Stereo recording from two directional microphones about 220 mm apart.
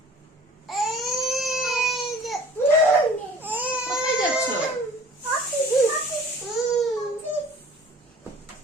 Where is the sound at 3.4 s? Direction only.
10° right (ahead or behind).